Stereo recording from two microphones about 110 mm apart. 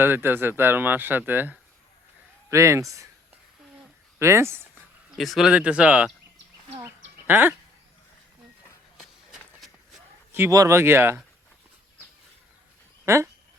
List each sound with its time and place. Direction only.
0.0 s speech: 20° right (ahead or behind)
4.2 s speech: 25° right (ahead or behind)
5.1 s speech: centre (ahead or behind)
5.5 s speech: 10° right (ahead or behind)
6.8 s a sound: 20° right (ahead or behind)
9.0 s run: centre (ahead or behind)
10.3 s speech: 20° right (ahead or behind)
13.1 s speech: 25° right (ahead or behind)